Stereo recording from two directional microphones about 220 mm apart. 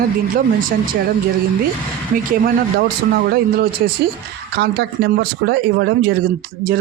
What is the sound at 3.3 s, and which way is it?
Speech, 45° right (ahead or behind).